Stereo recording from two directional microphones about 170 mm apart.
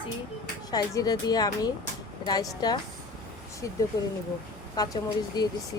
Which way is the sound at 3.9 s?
20° left (ahead or behind).